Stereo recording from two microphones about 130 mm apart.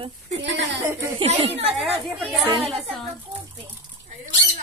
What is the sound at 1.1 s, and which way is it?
Speech, 50° right (ahead or behind).